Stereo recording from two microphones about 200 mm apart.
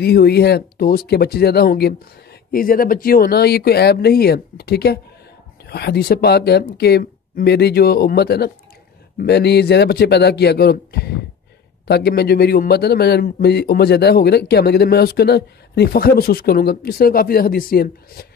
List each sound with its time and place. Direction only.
0.0 s speech: 50° left (ahead or behind)